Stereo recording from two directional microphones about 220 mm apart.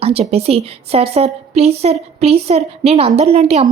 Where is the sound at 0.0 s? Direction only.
25° right (ahead or behind).